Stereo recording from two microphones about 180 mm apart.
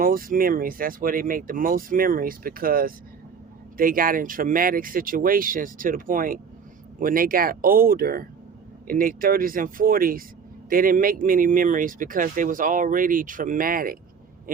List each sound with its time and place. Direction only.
0.0 s speech: 50° right (ahead or behind)